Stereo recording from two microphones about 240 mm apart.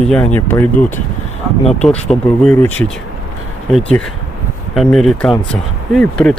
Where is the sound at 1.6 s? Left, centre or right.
Left.